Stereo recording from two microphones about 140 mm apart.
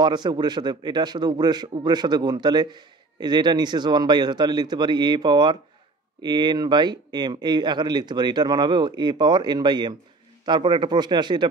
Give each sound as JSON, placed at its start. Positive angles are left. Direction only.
{"t": 0.0, "sound": "a man's voice", "side_deg": -30}